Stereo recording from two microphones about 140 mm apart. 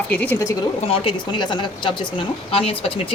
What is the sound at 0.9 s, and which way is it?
A woman's voice, 35° left (ahead or behind).